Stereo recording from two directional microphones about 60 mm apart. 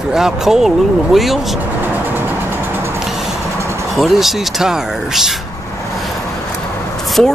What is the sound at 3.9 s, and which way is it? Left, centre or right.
Speech, centre.